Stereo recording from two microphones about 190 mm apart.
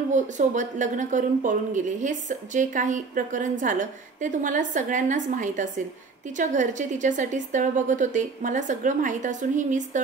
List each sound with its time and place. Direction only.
0.1 s a woman's voice: 40° right (ahead or behind)